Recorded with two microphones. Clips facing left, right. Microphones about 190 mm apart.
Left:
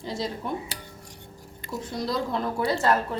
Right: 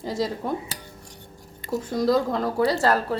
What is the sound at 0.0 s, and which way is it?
Speech, 40° right (ahead or behind).